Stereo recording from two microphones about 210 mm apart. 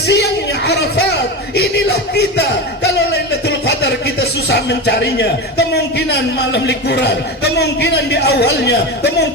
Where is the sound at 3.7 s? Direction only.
50° left (ahead or behind).